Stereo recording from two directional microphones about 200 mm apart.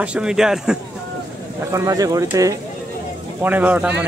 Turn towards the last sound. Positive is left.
turn(degrees=-5)  # may be behind; listen again after turning